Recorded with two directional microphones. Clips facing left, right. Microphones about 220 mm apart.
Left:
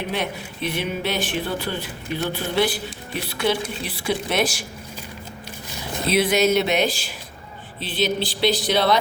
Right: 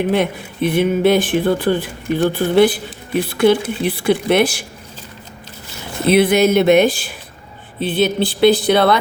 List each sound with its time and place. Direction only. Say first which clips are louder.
0.1 s speech: right 9 dB; 50° right (ahead or behind)
6.1 s speech: right 6 dB; 55° right (ahead or behind)